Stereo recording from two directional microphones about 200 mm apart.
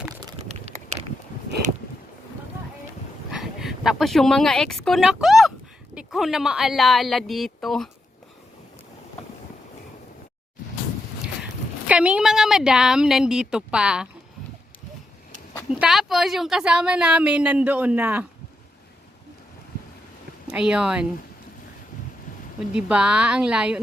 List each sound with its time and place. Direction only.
0.4 s a sound: 35° right (ahead or behind)
3.3 s speech: centre (ahead or behind)
11.9 s a woman's voice: 5° right (ahead or behind)
15.7 s a woman's voice: centre (ahead or behind)
20.5 s a woman's voice: 5° right (ahead or behind)
22.7 s a woman's voice: 5° right (ahead or behind)